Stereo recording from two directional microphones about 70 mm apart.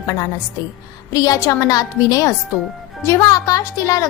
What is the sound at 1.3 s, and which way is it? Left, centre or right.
A woman's voice, left.